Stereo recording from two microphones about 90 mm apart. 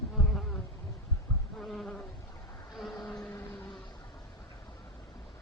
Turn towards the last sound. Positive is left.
turn(degrees=50)  # may be behind; listen again after turning